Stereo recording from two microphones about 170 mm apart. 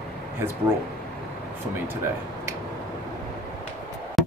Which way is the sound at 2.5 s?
15° right (ahead or behind).